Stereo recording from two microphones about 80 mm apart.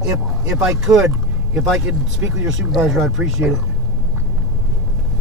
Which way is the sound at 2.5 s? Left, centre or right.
Centre.